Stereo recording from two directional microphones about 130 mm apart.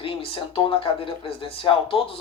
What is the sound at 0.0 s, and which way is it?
Speech, 45° left (ahead or behind).